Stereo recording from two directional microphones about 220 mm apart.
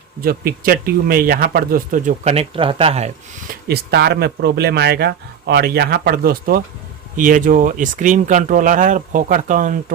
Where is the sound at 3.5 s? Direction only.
45° right (ahead or behind).